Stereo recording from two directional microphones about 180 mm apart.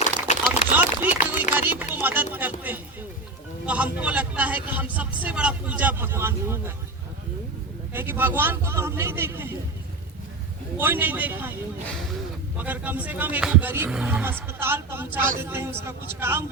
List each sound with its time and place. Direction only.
0.3 s a sound: 40° left (ahead or behind)
0.7 s a sound: 10° right (ahead or behind)
2.0 s speech: 10° right (ahead or behind)
7.9 s speech: 10° right (ahead or behind)
10.8 s speech: 10° right (ahead or behind)
12.5 s speech: 10° right (ahead or behind)